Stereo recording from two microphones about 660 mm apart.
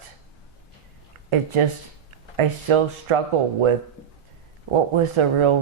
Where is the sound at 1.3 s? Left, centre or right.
Right.